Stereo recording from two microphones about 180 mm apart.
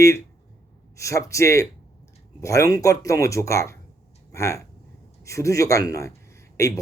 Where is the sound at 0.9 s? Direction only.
15° left (ahead or behind).